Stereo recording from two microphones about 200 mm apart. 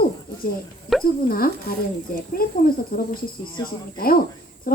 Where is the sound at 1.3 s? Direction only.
45° left (ahead or behind).